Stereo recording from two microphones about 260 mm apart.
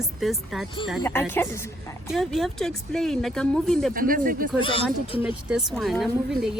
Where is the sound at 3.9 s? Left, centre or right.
Right.